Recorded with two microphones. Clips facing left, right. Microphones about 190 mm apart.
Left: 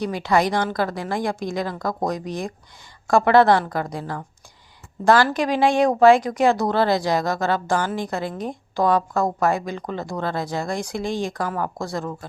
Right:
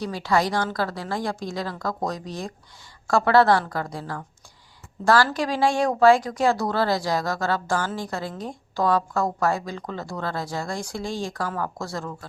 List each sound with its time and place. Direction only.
0.0 s a woman's voice: 20° left (ahead or behind)